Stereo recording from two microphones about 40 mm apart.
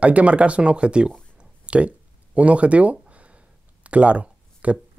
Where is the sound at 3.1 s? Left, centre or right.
Right.